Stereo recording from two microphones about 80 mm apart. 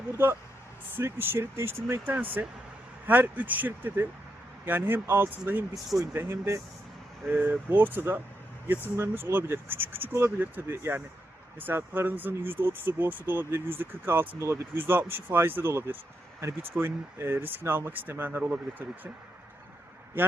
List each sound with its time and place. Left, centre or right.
0.9 s speech: right